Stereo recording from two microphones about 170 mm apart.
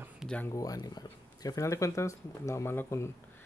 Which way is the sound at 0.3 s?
10° left (ahead or behind).